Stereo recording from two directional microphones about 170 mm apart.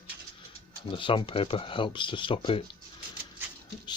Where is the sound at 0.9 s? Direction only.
30° left (ahead or behind).